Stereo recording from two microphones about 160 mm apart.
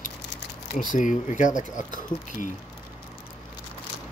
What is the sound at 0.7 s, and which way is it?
Speech, 55° left (ahead or behind).